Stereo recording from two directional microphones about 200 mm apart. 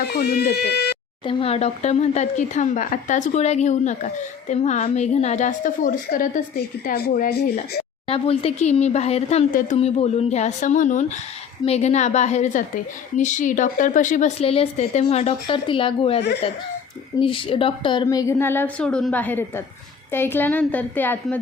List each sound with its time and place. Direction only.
0.0 s speech: 55° left (ahead or behind)
1.2 s speech: 25° left (ahead or behind); by 7.5 s 50° left (ahead or behind)
8.0 s speech: 30° left (ahead or behind)
9.5 s speech: 45° left (ahead or behind)
9.7 s a woman's voice: 30° left (ahead or behind); by 21.3 s 10° left (ahead or behind)